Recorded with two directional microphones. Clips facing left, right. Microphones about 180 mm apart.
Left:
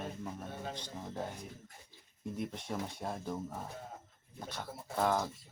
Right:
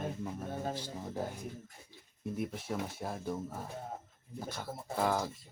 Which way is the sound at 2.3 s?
5° right (ahead or behind).